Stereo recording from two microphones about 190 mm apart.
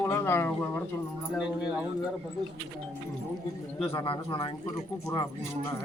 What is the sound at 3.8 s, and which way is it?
Speech, 25° left (ahead or behind).